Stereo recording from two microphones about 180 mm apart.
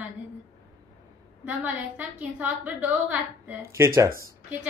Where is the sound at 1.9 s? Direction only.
10° right (ahead or behind).